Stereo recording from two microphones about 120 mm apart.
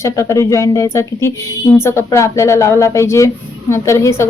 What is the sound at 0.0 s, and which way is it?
A woman's voice, 25° left (ahead or behind).